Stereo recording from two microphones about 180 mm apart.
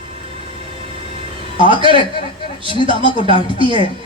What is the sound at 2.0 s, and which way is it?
Speech, 30° left (ahead or behind).